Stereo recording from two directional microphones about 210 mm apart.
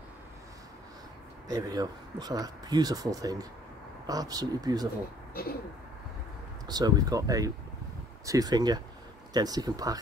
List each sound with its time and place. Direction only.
1.5 s speech: 20° right (ahead or behind)
6.7 s speech: 15° right (ahead or behind)